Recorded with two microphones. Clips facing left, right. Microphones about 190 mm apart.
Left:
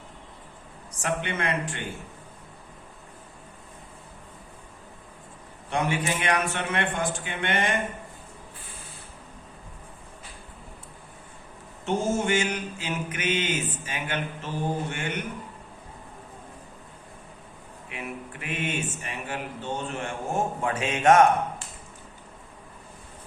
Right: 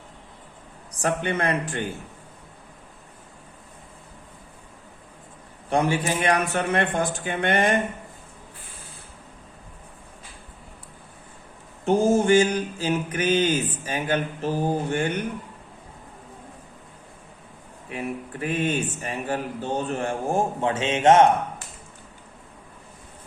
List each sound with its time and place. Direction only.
1.0 s speech: 40° right (ahead or behind)
5.7 s speech: 35° right (ahead or behind)
11.9 s speech: 35° right (ahead or behind)
17.8 s speech: 35° right (ahead or behind)